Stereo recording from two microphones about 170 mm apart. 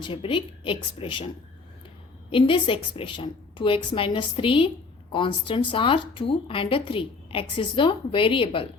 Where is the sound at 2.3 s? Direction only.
30° left (ahead or behind).